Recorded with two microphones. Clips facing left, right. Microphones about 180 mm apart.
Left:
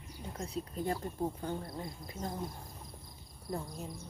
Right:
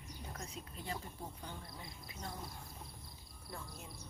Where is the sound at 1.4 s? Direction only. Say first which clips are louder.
Left 11 dB; 55° left (ahead or behind).